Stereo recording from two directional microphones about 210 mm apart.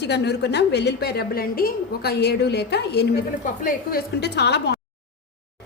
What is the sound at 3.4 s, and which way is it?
A woman's voice, 40° left (ahead or behind).